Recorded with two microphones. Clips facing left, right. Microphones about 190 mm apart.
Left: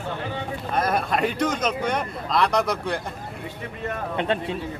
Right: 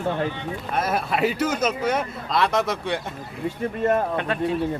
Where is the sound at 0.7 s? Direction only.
5° right (ahead or behind).